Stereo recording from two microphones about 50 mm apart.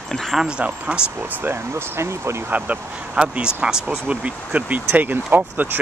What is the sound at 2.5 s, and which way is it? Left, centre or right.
Speech, right.